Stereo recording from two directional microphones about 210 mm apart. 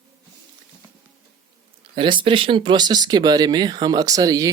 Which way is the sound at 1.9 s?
25° right (ahead or behind).